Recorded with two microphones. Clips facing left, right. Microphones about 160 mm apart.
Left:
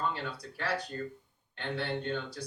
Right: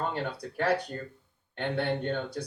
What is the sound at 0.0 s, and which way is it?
Speech, 55° right (ahead or behind).